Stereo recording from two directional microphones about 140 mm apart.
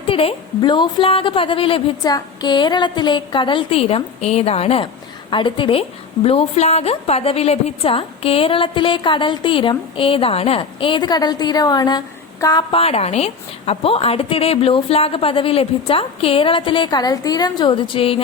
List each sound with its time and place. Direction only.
0.1 s a woman's voice: 40° left (ahead or behind)
12.7 s a woman's voice: 45° left (ahead or behind)